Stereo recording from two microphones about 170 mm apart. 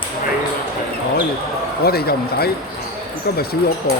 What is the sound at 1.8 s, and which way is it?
Speech, 65° left (ahead or behind).